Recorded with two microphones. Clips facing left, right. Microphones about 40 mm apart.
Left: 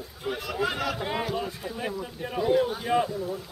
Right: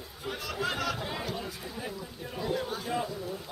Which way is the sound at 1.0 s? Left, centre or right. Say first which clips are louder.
Left 6 dB; left.